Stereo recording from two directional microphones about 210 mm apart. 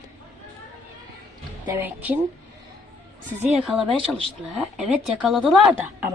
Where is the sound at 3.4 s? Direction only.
Centre (ahead or behind).